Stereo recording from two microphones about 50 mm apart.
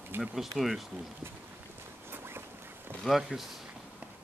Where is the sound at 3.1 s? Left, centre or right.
Centre.